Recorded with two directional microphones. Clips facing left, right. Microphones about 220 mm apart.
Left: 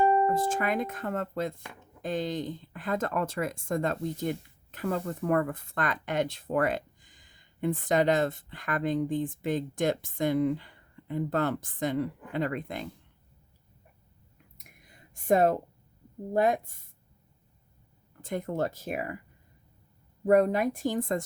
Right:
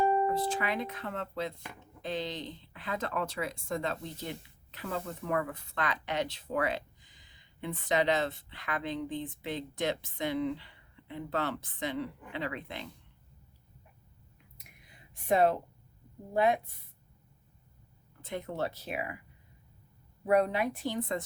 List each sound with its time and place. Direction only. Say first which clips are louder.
0.3 s speech: left 4 dB; 45° left (ahead or behind)
14.6 s a sound: left 3 dB; 45° left (ahead or behind)
16.3 s speech: left 2 dB; 45° left (ahead or behind)
18.2 s speech: left 5 dB; 45° left (ahead or behind)
20.2 s speech: left 4 dB; 45° left (ahead or behind)